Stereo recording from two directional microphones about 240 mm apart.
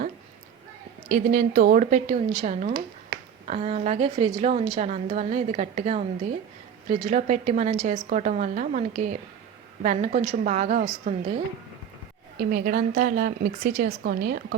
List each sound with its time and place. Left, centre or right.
1.1 s a woman's voice: right